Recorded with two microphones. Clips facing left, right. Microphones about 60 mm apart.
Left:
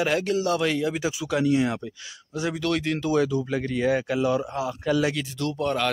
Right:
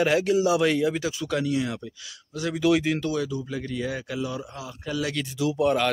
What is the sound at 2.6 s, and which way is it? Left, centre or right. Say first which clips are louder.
Speech: right 6 dB; centre.